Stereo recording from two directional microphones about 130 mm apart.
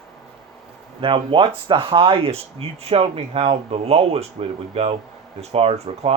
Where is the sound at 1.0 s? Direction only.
40° right (ahead or behind).